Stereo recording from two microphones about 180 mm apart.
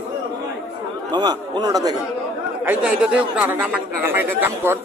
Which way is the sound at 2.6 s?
5° right (ahead or behind).